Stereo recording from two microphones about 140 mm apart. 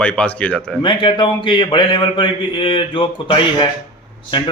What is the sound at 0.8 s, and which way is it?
Speech, 35° left (ahead or behind).